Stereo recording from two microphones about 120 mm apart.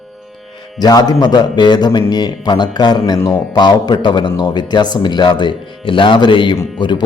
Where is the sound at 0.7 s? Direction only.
35° left (ahead or behind).